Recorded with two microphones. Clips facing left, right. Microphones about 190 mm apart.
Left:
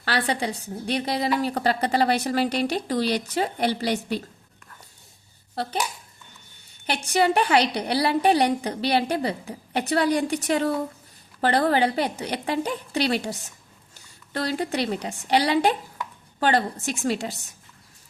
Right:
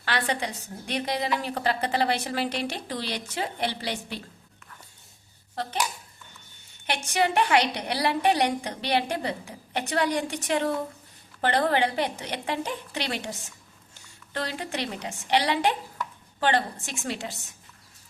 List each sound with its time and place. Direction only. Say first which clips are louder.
0.0 s a woman's voice: left 3 dB; 35° left (ahead or behind)
6.8 s a woman's voice: left 4 dB; 35° left (ahead or behind)
14.3 s a woman's voice: left 6 dB; 35° left (ahead or behind)